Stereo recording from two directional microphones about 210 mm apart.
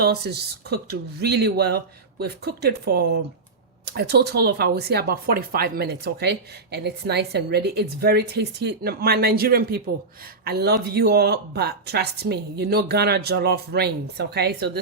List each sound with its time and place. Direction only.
0.0 s speech: 50° right (ahead or behind)